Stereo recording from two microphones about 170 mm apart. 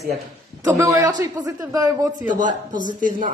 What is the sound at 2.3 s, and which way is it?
Speech, 50° right (ahead or behind).